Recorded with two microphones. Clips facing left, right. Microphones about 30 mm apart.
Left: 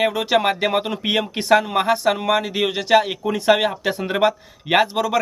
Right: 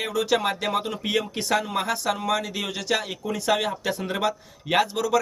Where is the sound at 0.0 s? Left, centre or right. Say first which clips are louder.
Left 5 dB; left.